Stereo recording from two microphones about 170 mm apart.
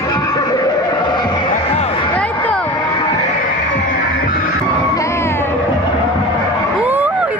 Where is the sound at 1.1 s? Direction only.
25° left (ahead or behind).